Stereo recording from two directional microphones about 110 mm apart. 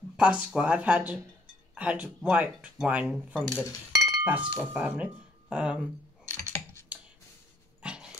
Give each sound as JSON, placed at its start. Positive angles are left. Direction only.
{"t": 0.2, "sound": "speech", "side_deg": -10}
{"t": 6.3, "sound": "typing", "side_deg": 25}
{"t": 7.8, "sound": "dog", "side_deg": -10}